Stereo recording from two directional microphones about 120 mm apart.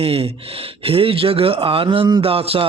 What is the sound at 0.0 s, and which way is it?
Speech, 55° right (ahead or behind).